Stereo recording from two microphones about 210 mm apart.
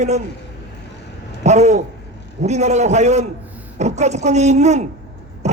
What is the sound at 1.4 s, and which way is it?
A man's voice, 30° right (ahead or behind).